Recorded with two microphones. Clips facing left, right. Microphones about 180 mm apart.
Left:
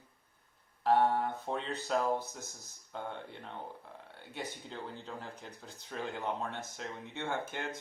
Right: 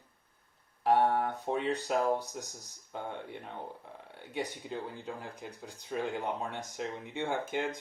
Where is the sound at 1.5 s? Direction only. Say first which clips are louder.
Right 4 dB; 15° right (ahead or behind).